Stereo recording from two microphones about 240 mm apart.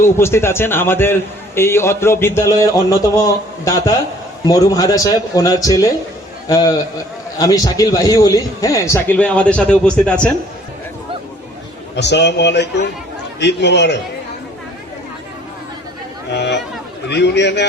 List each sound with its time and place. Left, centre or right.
0.0 s a man's voice: centre
11.9 s a man's voice: left
16.3 s a sound: left
17.1 s a man's voice: left